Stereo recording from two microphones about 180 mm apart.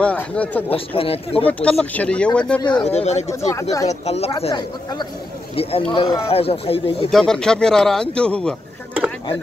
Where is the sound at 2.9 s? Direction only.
35° left (ahead or behind).